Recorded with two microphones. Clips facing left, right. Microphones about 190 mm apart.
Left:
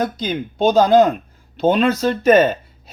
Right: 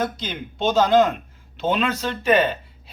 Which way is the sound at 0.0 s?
40° left (ahead or behind).